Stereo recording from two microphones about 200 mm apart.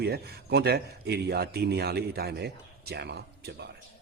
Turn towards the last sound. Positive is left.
turn(degrees=-55)  # may be behind; listen again after turning